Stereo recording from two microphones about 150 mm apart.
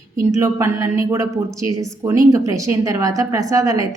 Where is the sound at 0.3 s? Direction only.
20° right (ahead or behind).